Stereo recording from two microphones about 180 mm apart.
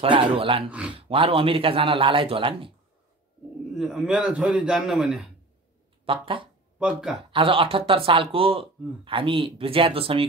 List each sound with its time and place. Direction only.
0.0 s speech: 30° right (ahead or behind)
0.7 s speech: 5° right (ahead or behind)
0.9 s a man's voice: 30° right (ahead or behind)
3.7 s a man's voice: centre (ahead or behind)
6.0 s speech: 30° right (ahead or behind)
6.8 s a man's voice: 5° right (ahead or behind)
7.2 s speech: 30° right (ahead or behind)